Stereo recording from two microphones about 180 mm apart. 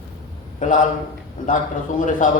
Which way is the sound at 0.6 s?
45° left (ahead or behind).